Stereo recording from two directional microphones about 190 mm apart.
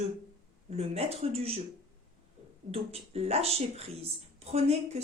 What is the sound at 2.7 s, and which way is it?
Speech, 30° right (ahead or behind).